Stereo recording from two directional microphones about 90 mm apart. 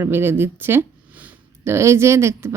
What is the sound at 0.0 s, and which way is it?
Speech, 25° right (ahead or behind).